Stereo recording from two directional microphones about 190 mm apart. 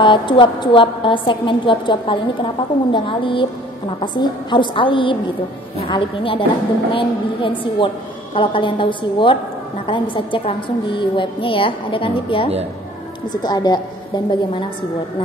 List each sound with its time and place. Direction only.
0.0 s a woman's voice: 25° left (ahead or behind)